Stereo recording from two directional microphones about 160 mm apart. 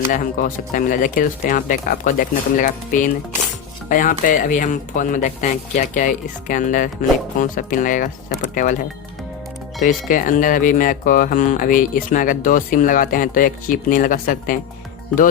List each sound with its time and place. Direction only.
0.1 s speech: 60° left (ahead or behind)